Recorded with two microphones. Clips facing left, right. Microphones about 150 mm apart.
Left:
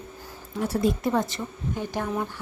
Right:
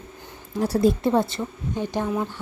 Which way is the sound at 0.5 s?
35° right (ahead or behind).